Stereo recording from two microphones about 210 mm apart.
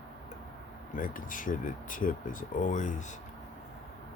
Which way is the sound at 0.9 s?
40° left (ahead or behind).